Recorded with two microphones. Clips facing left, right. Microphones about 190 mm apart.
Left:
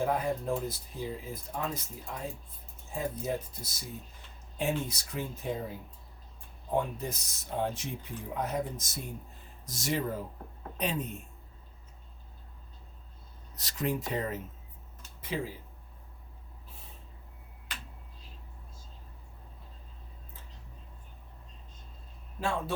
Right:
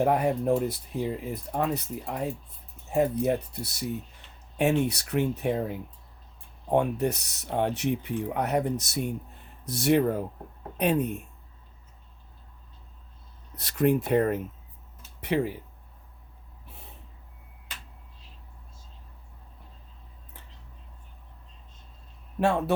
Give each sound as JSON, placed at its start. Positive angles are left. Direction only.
{"t": 0.0, "sound": "speech", "side_deg": -70}
{"t": 13.6, "sound": "speech", "side_deg": -60}
{"t": 22.4, "sound": "speech", "side_deg": -65}